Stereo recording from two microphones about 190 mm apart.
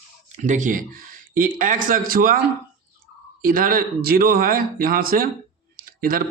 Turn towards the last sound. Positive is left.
turn(degrees=-50)  # may be behind; listen again after turning